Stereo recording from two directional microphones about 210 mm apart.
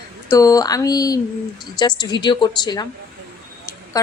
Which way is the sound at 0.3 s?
15° left (ahead or behind).